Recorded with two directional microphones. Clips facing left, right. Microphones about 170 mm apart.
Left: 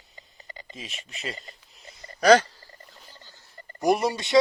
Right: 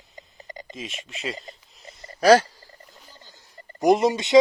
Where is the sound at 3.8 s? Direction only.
20° right (ahead or behind).